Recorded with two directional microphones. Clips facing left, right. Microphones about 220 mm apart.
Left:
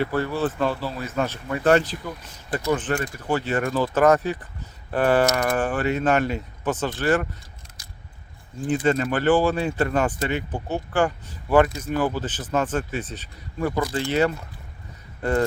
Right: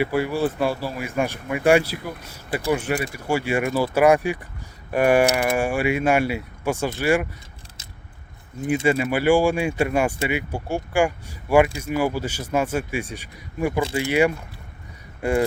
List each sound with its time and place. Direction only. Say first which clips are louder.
0.0 s speech: right 2 dB; 10° right (ahead or behind)
7.8 s biting: right 2 dB; 25° right (ahead or behind)
8.6 s speech: right 1 dB; 10° right (ahead or behind)